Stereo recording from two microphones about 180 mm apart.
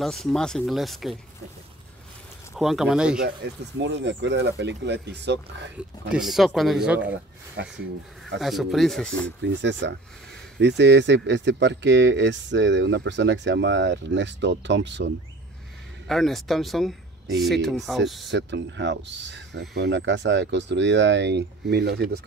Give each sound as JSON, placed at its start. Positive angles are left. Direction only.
{"t": 0.0, "sound": "speech", "side_deg": 0}
{"t": 2.5, "sound": "speech", "side_deg": 0}
{"t": 3.4, "sound": "speech", "side_deg": -80}
{"t": 5.8, "sound": "speech", "side_deg": -5}
{"t": 7.6, "sound": "speech", "side_deg": -75}
{"t": 8.4, "sound": "speech", "side_deg": 0}
{"t": 9.4, "sound": "speech", "side_deg": -80}
{"t": 16.1, "sound": "speech", "side_deg": 0}
{"t": 18.3, "sound": "speech", "side_deg": -85}